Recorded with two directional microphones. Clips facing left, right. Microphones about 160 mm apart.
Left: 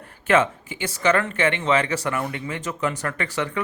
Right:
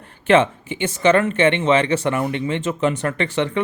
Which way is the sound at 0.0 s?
25° right (ahead or behind).